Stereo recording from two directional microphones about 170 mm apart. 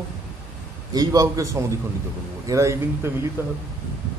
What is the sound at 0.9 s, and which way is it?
A man's voice, 20° right (ahead or behind).